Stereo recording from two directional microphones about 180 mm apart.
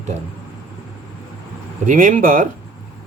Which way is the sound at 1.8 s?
45° right (ahead or behind).